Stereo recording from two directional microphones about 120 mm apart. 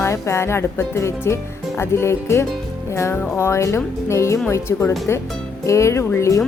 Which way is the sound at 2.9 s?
25° left (ahead or behind).